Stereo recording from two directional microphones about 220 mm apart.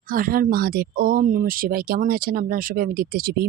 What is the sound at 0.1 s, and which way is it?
Speech, 40° right (ahead or behind).